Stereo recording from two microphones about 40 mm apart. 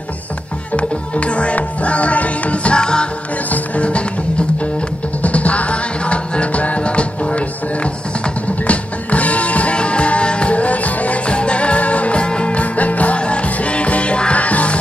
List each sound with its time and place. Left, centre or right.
0.7 s music: left
3.4 s music: left
5.2 s music: left
11.2 s music: left